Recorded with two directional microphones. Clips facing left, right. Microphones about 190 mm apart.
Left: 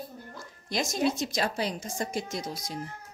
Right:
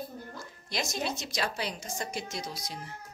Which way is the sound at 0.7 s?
45° left (ahead or behind).